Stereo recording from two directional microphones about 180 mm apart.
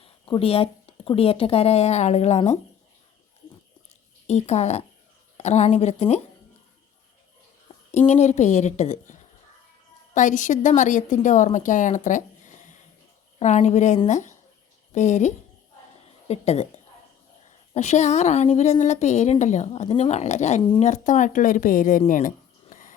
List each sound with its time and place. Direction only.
0.0 s speech: 30° left (ahead or behind)
4.3 s a woman's voice: 40° left (ahead or behind)
7.9 s a woman's voice: 40° left (ahead or behind)
10.2 s a woman's voice: 45° left (ahead or behind)
16.3 s a woman's voice: 35° left (ahead or behind)
22.7 s a sound: 45° left (ahead or behind)